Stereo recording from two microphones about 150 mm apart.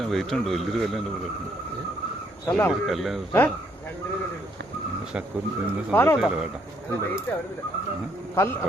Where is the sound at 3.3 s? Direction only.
15° left (ahead or behind).